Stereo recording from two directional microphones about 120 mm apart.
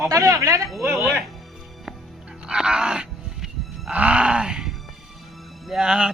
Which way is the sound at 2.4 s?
5° right (ahead or behind).